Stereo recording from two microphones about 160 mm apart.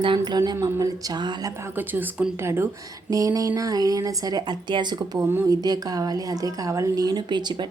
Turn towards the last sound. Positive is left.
turn(degrees=-30)  # may be behind; listen again after turning